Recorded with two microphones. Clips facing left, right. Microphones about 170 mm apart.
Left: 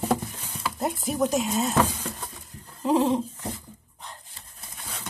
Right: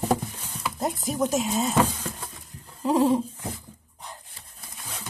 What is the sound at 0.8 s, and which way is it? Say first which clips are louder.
Speech: left 1 dB; centre (ahead or behind).